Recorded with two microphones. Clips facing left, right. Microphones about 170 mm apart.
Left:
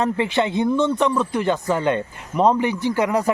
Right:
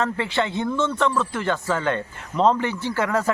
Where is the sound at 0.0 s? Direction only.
15° left (ahead or behind).